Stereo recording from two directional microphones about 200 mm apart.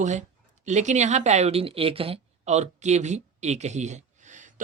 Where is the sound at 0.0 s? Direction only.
35° right (ahead or behind).